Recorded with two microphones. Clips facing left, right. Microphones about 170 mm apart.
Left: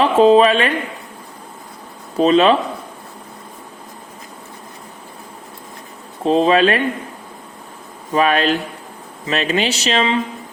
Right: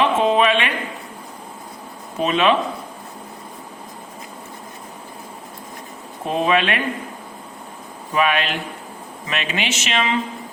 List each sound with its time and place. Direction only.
0.0 s speech: 35° left (ahead or behind)
2.1 s speech: 35° left (ahead or behind)
6.2 s speech: 30° left (ahead or behind)
8.1 s speech: 40° left (ahead or behind)